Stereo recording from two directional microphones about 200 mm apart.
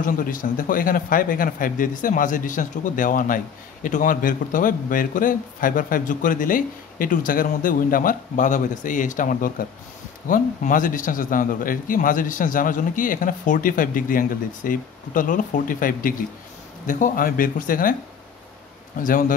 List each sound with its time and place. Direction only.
0.0 s a man's voice: 45° left (ahead or behind)
19.0 s speech: 40° left (ahead or behind)